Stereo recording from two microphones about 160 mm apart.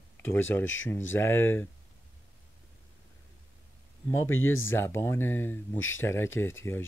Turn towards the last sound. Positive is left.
turn(degrees=15)  # may be behind; listen again after turning